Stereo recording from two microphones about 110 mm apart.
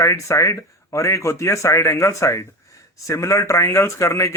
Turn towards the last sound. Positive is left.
turn(degrees=25)  # may be behind; listen again after turning